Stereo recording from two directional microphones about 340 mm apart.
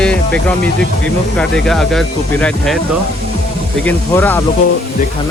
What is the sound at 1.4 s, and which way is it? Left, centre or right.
Speech, centre.